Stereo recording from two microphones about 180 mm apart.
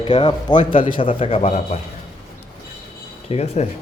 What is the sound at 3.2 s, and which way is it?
Speech, 35° left (ahead or behind).